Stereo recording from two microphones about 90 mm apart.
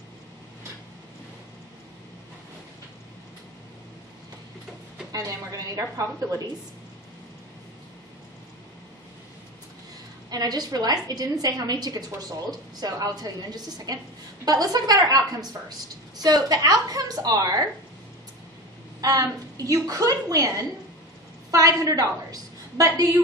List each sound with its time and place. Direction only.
5.1 s a woman's voice: 40° right (ahead or behind)
10.3 s a woman's voice: 45° right (ahead or behind)
18.9 s a woman's voice: 40° right (ahead or behind)